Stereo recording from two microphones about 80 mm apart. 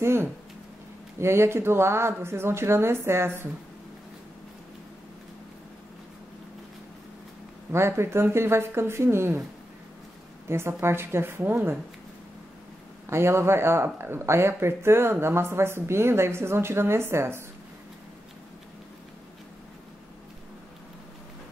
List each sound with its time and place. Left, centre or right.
0.0 s speech: right
7.7 s speech: right
10.5 s speech: right
13.1 s speech: right